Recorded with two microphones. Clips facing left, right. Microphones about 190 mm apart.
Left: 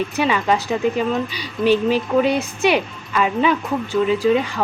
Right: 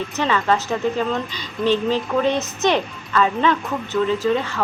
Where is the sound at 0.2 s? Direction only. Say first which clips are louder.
Even; 15° left (ahead or behind).